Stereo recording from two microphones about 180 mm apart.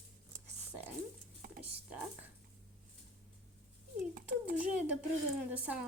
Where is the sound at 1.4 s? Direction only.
50° right (ahead or behind).